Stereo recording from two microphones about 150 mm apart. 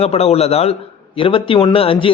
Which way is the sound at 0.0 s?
45° left (ahead or behind).